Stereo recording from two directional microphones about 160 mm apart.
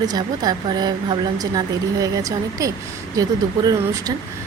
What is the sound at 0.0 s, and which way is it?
Speech, 25° right (ahead or behind).